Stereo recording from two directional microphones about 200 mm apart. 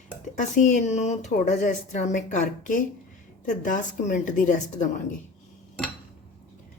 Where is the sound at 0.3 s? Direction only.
40° left (ahead or behind).